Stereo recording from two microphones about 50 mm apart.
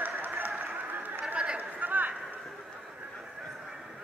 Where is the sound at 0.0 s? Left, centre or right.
Right.